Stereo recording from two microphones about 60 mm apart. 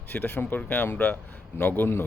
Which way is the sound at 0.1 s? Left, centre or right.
Left.